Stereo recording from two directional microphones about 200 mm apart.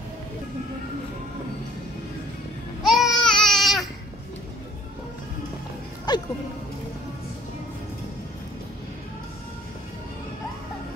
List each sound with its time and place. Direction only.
2.8 s baby cry: centre (ahead or behind)
6.1 s music: 20° left (ahead or behind)